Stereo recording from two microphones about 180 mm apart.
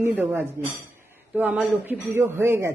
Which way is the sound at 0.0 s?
10° right (ahead or behind).